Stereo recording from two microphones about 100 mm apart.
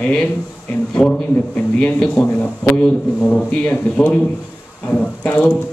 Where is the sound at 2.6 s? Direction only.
10° left (ahead or behind).